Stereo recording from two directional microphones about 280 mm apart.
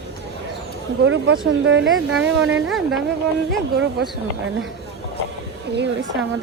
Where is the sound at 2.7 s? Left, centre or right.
Centre.